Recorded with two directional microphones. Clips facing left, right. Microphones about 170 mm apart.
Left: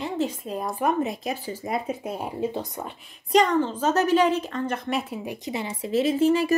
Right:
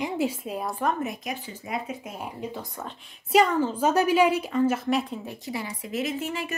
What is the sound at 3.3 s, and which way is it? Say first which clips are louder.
A woman's voice: left 1 dB; 5° right (ahead or behind).